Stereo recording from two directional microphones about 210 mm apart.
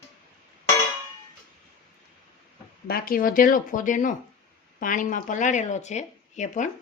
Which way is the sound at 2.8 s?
45° left (ahead or behind).